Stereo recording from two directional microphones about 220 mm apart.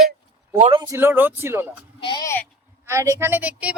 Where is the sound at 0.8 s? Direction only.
10° right (ahead or behind).